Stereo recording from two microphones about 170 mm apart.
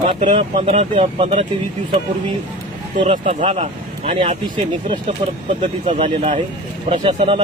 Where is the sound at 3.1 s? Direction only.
35° right (ahead or behind).